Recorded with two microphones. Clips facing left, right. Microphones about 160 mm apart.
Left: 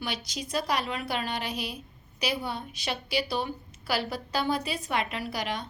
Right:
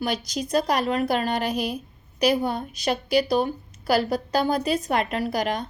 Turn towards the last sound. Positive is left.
turn(degrees=-45)  # may be behind; listen again after turning